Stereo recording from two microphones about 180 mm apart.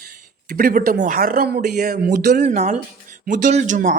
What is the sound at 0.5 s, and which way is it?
A man's voice, 50° right (ahead or behind).